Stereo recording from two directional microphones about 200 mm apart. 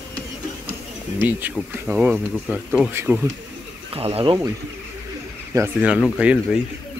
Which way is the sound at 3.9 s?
30° right (ahead or behind).